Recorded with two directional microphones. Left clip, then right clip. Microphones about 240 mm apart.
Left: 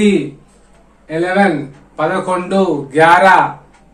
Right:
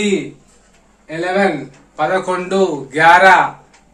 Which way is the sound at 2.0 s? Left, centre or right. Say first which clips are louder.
Left 1 dB; centre.